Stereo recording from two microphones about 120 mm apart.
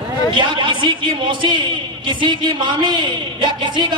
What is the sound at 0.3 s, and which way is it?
A man's voice, 40° right (ahead or behind).